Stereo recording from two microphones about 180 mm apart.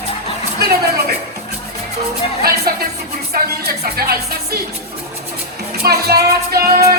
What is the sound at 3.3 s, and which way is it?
Speech, 60° right (ahead or behind).